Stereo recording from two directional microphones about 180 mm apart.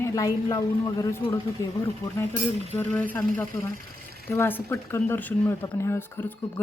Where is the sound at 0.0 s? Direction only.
20° left (ahead or behind).